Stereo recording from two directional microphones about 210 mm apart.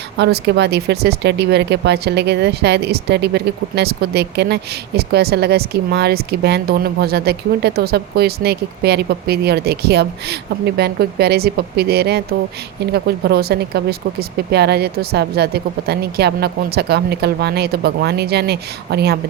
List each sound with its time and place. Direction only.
0.2 s speech: 50° right (ahead or behind)